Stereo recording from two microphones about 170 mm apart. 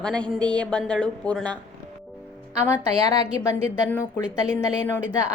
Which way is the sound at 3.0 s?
20° left (ahead or behind).